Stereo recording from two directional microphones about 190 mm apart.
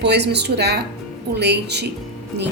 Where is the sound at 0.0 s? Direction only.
60° right (ahead or behind).